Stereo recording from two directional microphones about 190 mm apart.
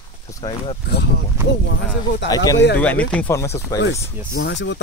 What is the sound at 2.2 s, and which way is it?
Speech, 20° left (ahead or behind).